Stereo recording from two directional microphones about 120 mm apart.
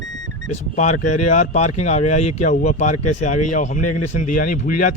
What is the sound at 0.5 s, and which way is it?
Speech, 80° left.